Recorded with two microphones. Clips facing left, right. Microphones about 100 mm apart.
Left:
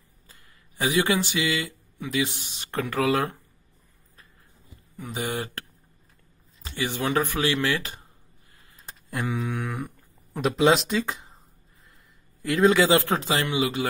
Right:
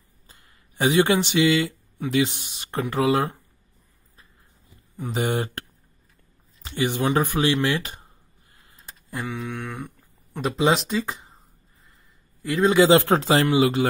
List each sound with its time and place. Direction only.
0.3 s speech: 25° right (ahead or behind)
2.3 s speech: 45° right (ahead or behind)
2.7 s speech: 20° right (ahead or behind)
4.9 s speech: 30° right (ahead or behind)
6.8 s speech: 20° right (ahead or behind)
9.1 s speech: centre (ahead or behind)
12.4 s speech: 5° right (ahead or behind)
12.7 s speech: 20° right (ahead or behind)
13.2 s speech: 35° right (ahead or behind)